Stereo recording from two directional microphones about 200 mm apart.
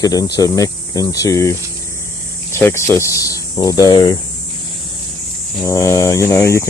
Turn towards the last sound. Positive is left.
turn(degrees=15)  # may be behind; listen again after turning